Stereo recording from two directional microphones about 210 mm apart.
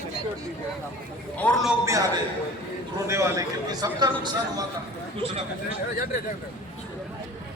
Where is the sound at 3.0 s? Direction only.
15° right (ahead or behind).